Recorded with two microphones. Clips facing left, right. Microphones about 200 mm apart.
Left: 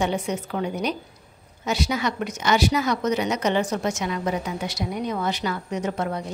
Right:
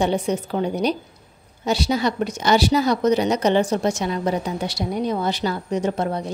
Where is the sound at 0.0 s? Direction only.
35° right (ahead or behind).